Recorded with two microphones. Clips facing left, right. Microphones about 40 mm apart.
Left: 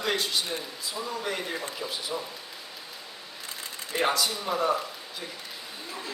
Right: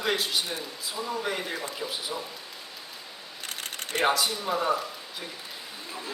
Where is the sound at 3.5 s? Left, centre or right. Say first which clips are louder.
Right 2 dB; right.